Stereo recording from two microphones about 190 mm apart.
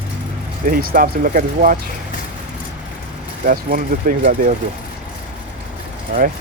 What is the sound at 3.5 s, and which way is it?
Speech, 45° right (ahead or behind).